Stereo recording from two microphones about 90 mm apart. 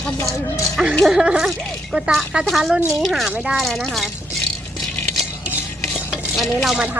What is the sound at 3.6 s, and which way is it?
Speech, 5° left (ahead or behind).